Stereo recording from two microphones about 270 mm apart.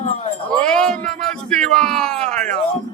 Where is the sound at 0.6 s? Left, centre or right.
Centre.